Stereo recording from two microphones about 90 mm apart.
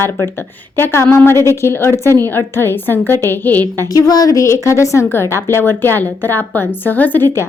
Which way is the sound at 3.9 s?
45° left (ahead or behind).